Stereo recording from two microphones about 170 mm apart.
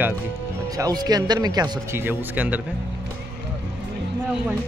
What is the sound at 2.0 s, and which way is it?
Speech, 10° right (ahead or behind).